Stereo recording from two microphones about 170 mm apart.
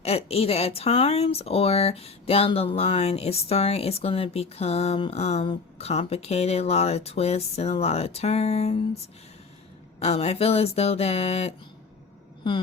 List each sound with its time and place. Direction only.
0.0 s speech: 35° left (ahead or behind)
10.0 s speech: 40° left (ahead or behind)